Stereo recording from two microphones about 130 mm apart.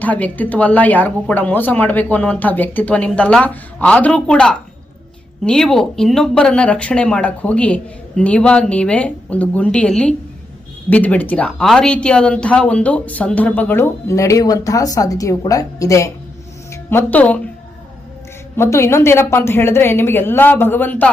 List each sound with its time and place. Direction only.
0.0 s a woman's voice: 10° left (ahead or behind)
18.5 s a woman's voice: 20° left (ahead or behind)